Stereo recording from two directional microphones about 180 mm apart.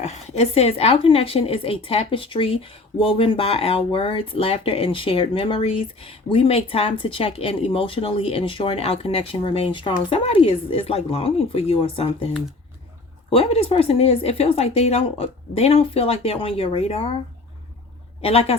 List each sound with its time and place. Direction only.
0.0 s a woman's voice: 35° left (ahead or behind)
13.3 s a woman's voice: 35° left (ahead or behind)
18.2 s a woman's voice: 35° left (ahead or behind)